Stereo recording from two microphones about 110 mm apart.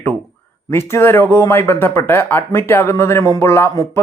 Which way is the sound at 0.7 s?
25° left (ahead or behind).